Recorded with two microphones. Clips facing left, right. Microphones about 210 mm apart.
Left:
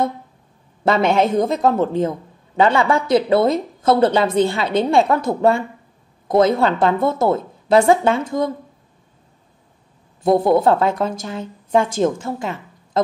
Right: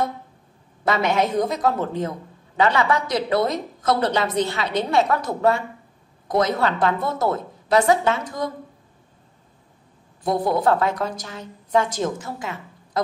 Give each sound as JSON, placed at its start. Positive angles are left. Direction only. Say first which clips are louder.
{"t": 0.8, "sound": "a woman's voice", "louder": "left 5 dB", "side_deg": 30}
{"t": 10.2, "sound": "a woman's voice", "louder": "left 6 dB", "side_deg": 25}